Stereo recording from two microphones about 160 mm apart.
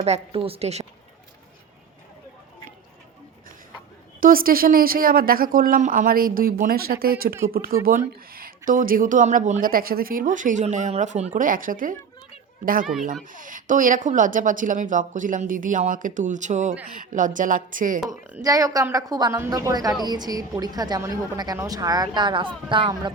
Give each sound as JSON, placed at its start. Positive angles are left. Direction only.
{"t": 0.0, "sound": "a woman's voice", "side_deg": -40}
{"t": 4.2, "sound": "speech", "side_deg": -65}
{"t": 11.3, "sound": "speech", "side_deg": -60}
{"t": 12.8, "sound": "speech", "side_deg": 0}
{"t": 13.3, "sound": "speech", "side_deg": -55}
{"t": 18.0, "sound": "speech", "side_deg": -5}
{"t": 18.4, "sound": "a woman's voice", "side_deg": -20}